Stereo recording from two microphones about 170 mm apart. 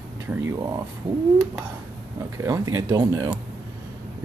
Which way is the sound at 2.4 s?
20° right (ahead or behind).